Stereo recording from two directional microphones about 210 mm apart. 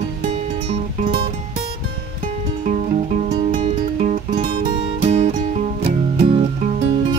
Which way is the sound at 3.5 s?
35° right (ahead or behind).